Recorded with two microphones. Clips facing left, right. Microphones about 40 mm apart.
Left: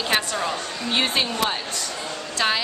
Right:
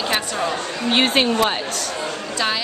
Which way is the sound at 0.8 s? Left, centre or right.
Right.